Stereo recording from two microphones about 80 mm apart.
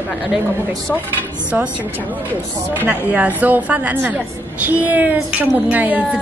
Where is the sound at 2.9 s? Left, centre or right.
Centre.